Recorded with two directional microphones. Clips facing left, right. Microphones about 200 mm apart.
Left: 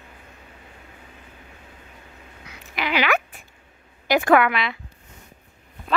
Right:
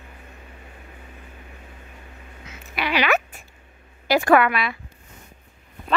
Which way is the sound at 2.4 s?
15° left (ahead or behind).